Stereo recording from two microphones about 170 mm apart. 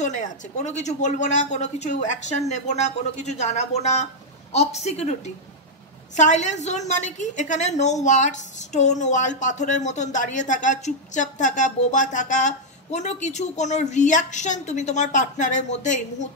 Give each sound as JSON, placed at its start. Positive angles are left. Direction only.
{"t": 0.0, "sound": "a woman's voice", "side_deg": 45}